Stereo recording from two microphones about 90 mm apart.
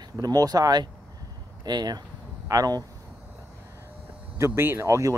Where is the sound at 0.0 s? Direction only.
45° right (ahead or behind).